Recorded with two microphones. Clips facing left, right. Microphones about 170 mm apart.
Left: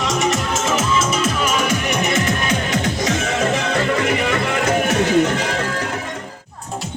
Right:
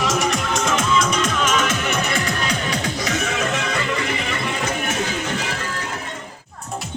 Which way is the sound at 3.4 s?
50° left (ahead or behind).